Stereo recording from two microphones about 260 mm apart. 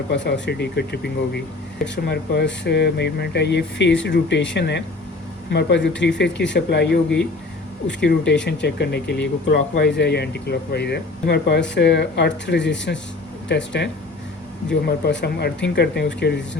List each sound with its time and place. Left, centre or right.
0.1 s speech: left